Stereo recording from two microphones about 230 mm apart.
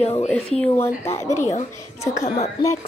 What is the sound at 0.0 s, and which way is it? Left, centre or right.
Speech, left.